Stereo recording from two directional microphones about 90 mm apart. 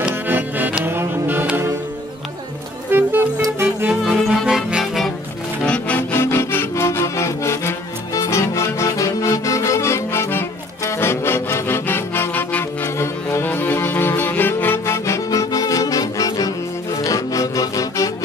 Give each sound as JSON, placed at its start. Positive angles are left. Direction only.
{"t": 0.3, "sound": "music", "side_deg": -20}
{"t": 2.9, "sound": "music", "side_deg": -20}
{"t": 4.0, "sound": "music", "side_deg": 0}
{"t": 5.7, "sound": "music", "side_deg": 15}
{"t": 6.1, "sound": "music", "side_deg": 25}